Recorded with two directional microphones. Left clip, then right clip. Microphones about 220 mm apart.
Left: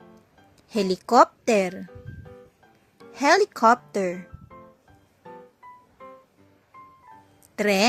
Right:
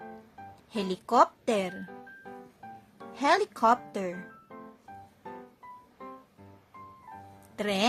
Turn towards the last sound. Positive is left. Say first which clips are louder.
# left 8 dB
turn(degrees=25)  # may be behind; listen again after turning